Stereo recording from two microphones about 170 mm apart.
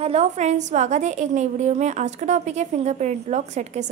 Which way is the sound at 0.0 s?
40° right (ahead or behind).